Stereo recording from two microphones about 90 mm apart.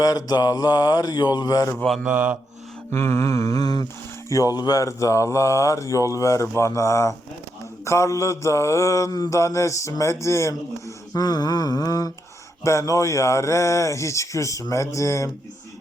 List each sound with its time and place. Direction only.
0.0 s mantra: 45° left (ahead or behind)
2.0 s speech: 15° right (ahead or behind)
2.9 s speech: 30° left (ahead or behind)
11.1 s mantra: 45° left (ahead or behind)
12.6 s speech: 35° left (ahead or behind)